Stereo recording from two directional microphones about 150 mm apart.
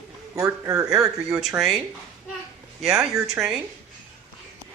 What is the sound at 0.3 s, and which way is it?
Speech, 20° right (ahead or behind).